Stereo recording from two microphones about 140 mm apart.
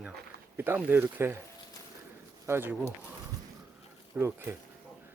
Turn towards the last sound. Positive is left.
turn(degrees=-15)  # may be behind; listen again after turning